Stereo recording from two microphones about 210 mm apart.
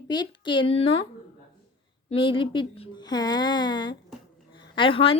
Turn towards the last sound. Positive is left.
turn(degrees=25)  # may be behind; listen again after turning